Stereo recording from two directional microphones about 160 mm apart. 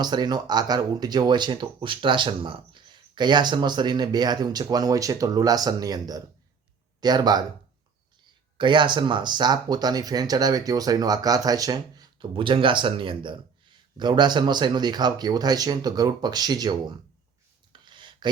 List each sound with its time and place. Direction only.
0.0 s speech: 25° right (ahead or behind)
8.5 s speech: 30° right (ahead or behind)
17.7 s a sound: 30° right (ahead or behind)